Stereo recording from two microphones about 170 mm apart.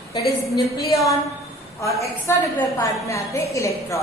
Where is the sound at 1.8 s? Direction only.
20° left (ahead or behind).